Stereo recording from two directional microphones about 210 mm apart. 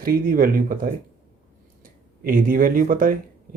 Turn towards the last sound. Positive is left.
turn(degrees=-40)  # may be behind; listen again after turning